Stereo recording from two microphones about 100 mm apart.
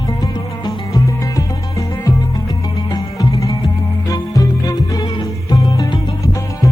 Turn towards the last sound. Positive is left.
turn(degrees=40)  # may be behind; listen again after turning